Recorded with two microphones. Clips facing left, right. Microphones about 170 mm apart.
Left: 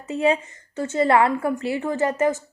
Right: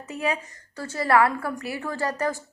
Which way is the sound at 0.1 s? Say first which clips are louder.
Left 7 dB; 25° left (ahead or behind).